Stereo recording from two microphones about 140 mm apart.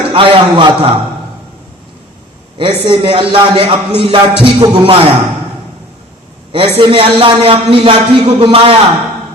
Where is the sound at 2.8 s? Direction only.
40° right (ahead or behind).